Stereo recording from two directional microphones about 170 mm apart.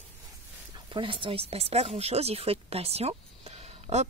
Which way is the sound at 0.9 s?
30° right (ahead or behind).